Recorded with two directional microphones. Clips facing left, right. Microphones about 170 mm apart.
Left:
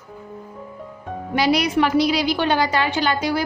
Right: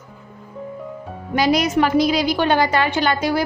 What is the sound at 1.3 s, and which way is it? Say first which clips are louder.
A woman's voice: right 1 dB; 45° right (ahead or behind).